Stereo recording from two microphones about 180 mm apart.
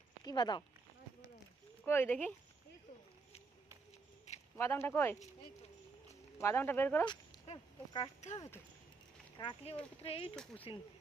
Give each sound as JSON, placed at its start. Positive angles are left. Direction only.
{"t": 0.3, "sound": "speech", "side_deg": 25}
{"t": 1.8, "sound": "speech", "side_deg": 10}
{"t": 4.5, "sound": "speech", "side_deg": 15}
{"t": 6.4, "sound": "speech", "side_deg": 15}
{"t": 7.4, "sound": "speech", "side_deg": 30}
{"t": 8.4, "sound": "speech", "side_deg": 15}
{"t": 9.4, "sound": "speech", "side_deg": 25}